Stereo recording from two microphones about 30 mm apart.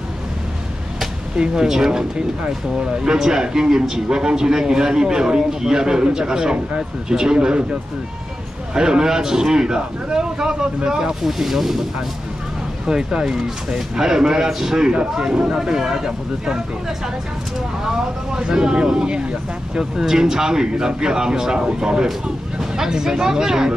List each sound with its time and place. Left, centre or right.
1.5 s a man's voice: centre
8.7 s a man's voice: right
11.2 s speech: centre
12.8 s a man's voice: right
14.9 s a man's voice: right
17.8 s a man's voice: right
19.8 s a man's voice: centre